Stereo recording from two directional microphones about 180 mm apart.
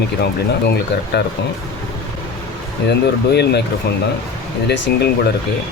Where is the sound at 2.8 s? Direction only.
65° left (ahead or behind).